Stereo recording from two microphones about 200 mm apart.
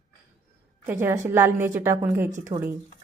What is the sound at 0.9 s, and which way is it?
A woman's voice, 10° right (ahead or behind).